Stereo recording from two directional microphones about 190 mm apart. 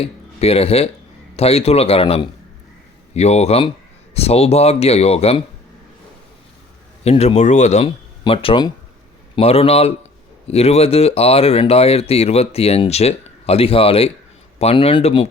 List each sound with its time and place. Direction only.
0.0 s speech: 30° left (ahead or behind)
7.0 s speech: 35° left (ahead or behind)